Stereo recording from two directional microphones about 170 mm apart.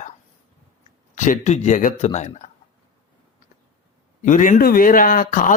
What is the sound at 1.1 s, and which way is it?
Speech, 45° left (ahead or behind).